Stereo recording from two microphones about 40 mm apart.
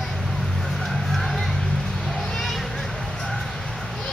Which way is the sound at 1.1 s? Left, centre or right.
Centre.